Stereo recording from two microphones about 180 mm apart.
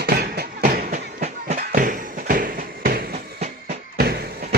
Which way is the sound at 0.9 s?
40° right (ahead or behind).